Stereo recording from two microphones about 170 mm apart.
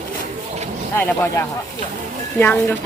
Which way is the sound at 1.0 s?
15° left (ahead or behind).